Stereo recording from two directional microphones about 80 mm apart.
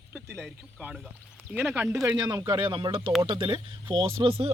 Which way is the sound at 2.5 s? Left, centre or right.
Right.